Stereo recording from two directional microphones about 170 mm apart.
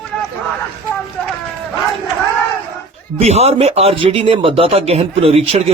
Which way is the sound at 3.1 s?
40° right (ahead or behind).